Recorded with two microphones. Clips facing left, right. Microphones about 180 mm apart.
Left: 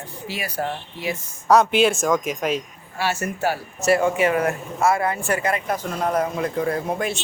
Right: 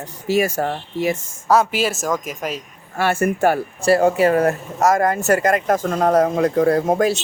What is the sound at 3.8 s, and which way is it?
Speech, 35° right (ahead or behind).